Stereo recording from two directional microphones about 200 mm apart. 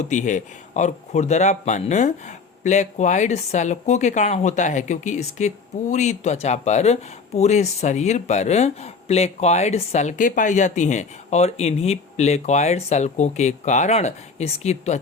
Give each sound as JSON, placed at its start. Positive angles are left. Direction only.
{"t": 0.0, "sound": "speech", "side_deg": 35}